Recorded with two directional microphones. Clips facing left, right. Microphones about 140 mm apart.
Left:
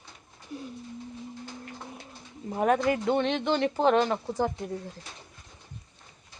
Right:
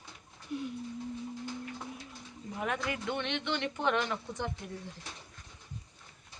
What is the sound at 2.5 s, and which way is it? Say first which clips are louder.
Speech: left 11 dB; 40° left (ahead or behind).